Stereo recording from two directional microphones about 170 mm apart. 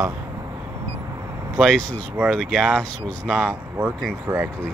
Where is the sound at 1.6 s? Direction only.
Centre (ahead or behind).